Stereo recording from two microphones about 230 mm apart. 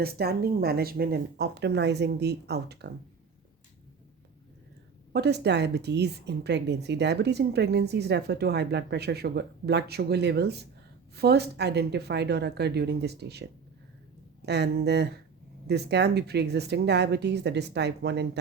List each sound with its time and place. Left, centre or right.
0.0 s a woman's voice: right
5.1 s a woman's voice: right